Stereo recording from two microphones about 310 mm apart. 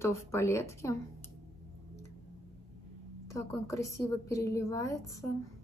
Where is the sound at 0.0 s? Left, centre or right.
Centre.